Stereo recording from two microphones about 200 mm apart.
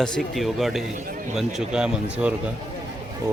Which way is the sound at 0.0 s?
Centre (ahead or behind).